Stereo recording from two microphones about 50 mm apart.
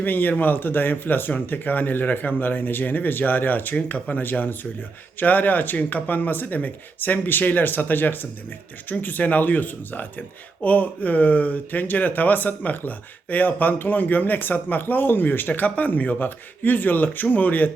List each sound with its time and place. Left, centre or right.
0.0 s speech: left